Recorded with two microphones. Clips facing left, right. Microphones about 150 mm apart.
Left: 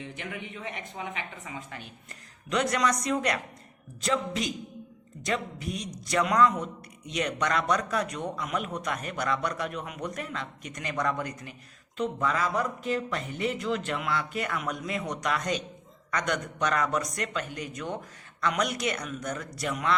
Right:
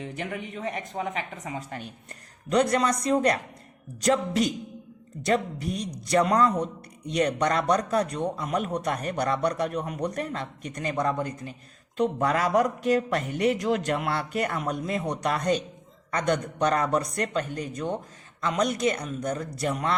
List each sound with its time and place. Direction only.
0.0 s a man's voice: 40° right (ahead or behind)
6.1 s a man's voice: 35° right (ahead or behind)
11.9 s a man's voice: 40° right (ahead or behind)